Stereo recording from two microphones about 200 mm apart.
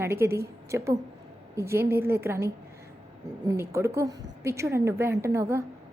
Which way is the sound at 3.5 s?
15° right (ahead or behind).